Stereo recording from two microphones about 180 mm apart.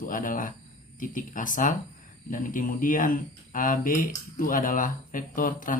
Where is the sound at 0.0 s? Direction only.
50° left (ahead or behind).